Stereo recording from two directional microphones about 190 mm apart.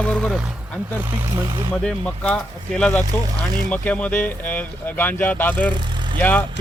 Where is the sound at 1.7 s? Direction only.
5° left (ahead or behind).